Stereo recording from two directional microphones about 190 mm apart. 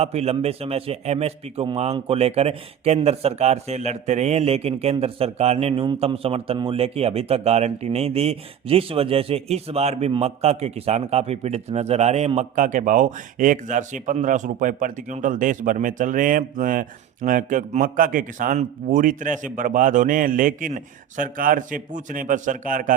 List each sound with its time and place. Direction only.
0.0 s a man's voice: 35° right (ahead or behind)